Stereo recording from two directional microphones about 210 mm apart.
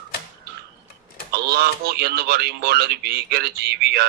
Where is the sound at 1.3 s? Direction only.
50° right (ahead or behind).